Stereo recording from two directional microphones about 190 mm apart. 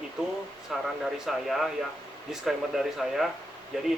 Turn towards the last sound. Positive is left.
turn(degrees=-5)  # may be behind; listen again after turning